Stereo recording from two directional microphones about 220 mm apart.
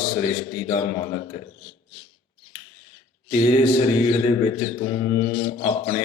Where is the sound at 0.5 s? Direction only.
25° left (ahead or behind).